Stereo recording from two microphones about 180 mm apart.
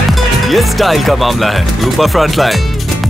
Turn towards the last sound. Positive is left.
turn(degrees=0)  # may be behind; listen again after turning